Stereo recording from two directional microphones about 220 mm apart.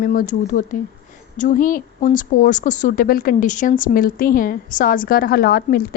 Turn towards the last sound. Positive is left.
turn(degrees=40)  # may be behind; listen again after turning